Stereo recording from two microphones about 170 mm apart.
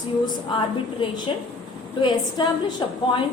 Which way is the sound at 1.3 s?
30° left (ahead or behind).